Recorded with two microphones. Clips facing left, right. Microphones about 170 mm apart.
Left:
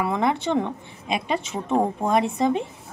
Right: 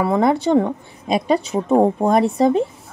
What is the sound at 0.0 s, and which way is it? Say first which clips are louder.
A woman's voice: right 6 dB; 35° right (ahead or behind).